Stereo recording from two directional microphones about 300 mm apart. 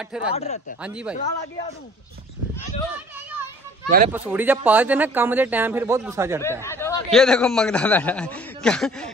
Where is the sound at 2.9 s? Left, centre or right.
Centre.